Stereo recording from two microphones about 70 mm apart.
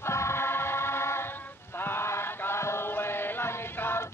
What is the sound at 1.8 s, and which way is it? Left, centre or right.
Chant, left.